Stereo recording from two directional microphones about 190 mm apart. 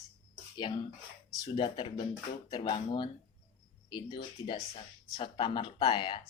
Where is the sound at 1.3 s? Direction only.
25° left (ahead or behind).